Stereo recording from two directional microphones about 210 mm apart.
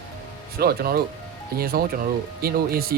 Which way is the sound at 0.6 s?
45° right (ahead or behind).